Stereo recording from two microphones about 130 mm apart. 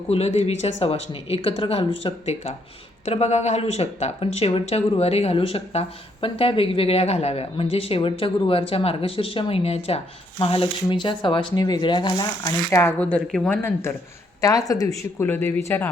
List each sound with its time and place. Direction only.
0.1 s speech: 55° left (ahead or behind); by 12.5 s 35° left (ahead or behind)
12.7 s speech: 15° left (ahead or behind)
13.5 s speech: 15° left (ahead or behind)